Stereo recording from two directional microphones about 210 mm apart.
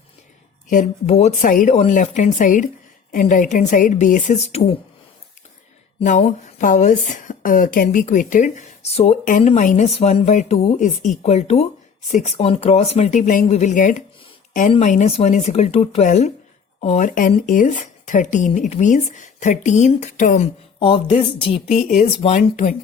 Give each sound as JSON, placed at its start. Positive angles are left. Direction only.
{"t": 0.7, "sound": "speech", "side_deg": 35}
{"t": 6.0, "sound": "speech", "side_deg": 35}
{"t": 20.7, "sound": "speech", "side_deg": 25}